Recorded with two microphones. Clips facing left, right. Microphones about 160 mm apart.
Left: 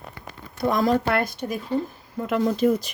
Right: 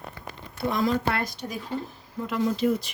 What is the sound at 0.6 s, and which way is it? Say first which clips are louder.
Speech: left 4 dB; 45° left (ahead or behind).